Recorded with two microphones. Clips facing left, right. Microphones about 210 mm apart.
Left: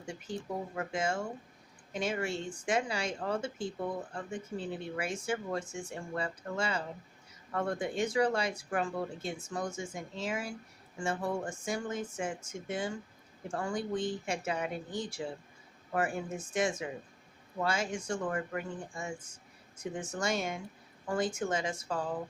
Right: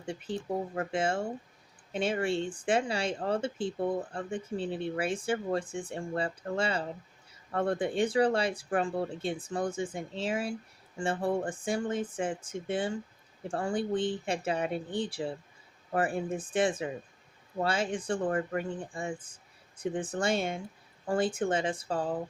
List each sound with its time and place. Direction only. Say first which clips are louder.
0.8 s speech: right 2 dB; 30° right (ahead or behind)
19.3 s a sound: left 3 dB; 30° right (ahead or behind)
20.0 s speech: right 3 dB; 30° right (ahead or behind)